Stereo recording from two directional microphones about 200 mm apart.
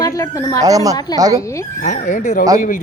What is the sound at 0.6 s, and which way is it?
Speech, 15° right (ahead or behind).